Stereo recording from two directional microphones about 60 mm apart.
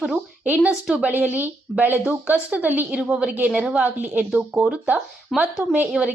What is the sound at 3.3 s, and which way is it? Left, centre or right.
Speech, right.